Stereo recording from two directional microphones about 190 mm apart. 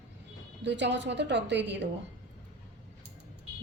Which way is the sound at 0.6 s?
70° right (ahead or behind).